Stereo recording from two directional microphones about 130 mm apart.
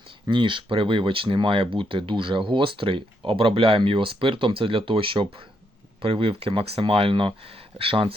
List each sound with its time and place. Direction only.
0.3 s speech: 40° right (ahead or behind)